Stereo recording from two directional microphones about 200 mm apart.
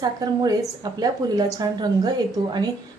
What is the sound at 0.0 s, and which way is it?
A woman's voice, 20° right (ahead or behind).